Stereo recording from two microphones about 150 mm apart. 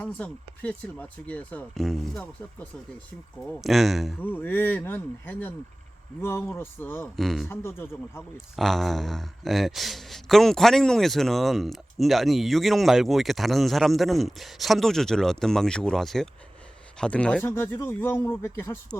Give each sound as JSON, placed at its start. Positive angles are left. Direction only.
{"t": 0.2, "sound": "speech", "side_deg": 10}
{"t": 3.4, "sound": "speech", "side_deg": 0}
{"t": 4.2, "sound": "speech", "side_deg": 10}
{"t": 6.6, "sound": "speech", "side_deg": 15}
{"t": 7.2, "sound": "speech", "side_deg": 0}
{"t": 7.5, "sound": "speech", "side_deg": 15}
{"t": 8.5, "sound": "speech", "side_deg": 0}